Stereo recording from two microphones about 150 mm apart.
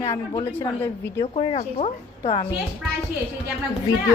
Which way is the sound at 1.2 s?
35° left (ahead or behind).